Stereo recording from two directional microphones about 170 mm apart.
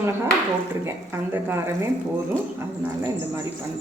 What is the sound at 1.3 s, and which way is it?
Speech, 15° right (ahead or behind).